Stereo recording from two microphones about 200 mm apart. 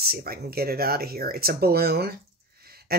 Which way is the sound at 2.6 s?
50° right (ahead or behind).